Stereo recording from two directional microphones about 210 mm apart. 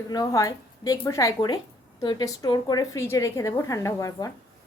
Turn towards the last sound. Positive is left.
turn(degrees=15)  # may be behind; listen again after turning